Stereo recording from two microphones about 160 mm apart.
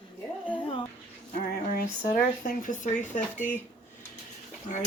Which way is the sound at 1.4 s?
65° left (ahead or behind).